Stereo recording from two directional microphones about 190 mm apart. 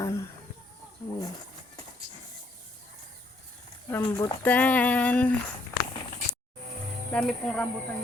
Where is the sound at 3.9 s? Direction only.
15° left (ahead or behind).